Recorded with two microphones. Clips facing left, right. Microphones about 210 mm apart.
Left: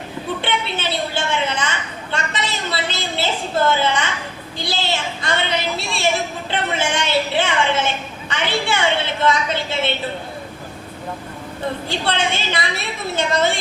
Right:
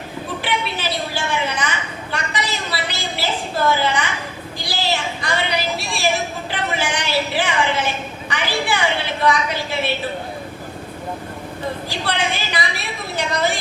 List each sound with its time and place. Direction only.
0.4 s a sound: 25° left (ahead or behind)
9.2 s a woman's voice: 25° left (ahead or behind)
11.9 s a woman's voice: 25° left (ahead or behind)